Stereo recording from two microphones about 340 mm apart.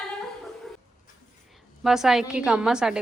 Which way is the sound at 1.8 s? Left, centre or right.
Centre.